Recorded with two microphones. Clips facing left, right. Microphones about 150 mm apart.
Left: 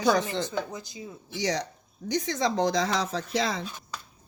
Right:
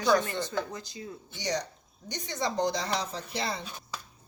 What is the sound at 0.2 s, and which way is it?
Speech, 90° left.